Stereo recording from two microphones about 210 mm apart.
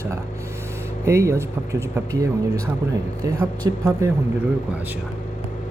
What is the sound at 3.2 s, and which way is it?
Speech, 15° right (ahead or behind).